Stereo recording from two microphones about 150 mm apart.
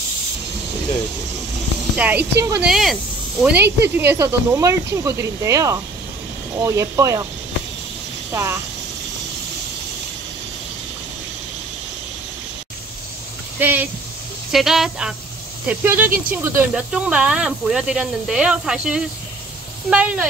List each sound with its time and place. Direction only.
2.0 s speech: 10° right (ahead or behind)
2.7 s speech: centre (ahead or behind)
3.8 s speech: 15° right (ahead or behind)
8.3 s speech: 20° right (ahead or behind)
13.6 s speech: 10° right (ahead or behind)
14.5 s speech: centre (ahead or behind)